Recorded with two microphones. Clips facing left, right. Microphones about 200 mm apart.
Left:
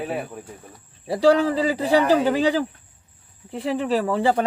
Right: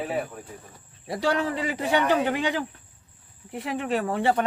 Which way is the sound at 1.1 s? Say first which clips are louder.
Left 8 dB; 30° left (ahead or behind).